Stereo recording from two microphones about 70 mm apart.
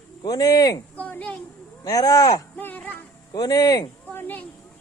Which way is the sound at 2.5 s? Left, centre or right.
Left.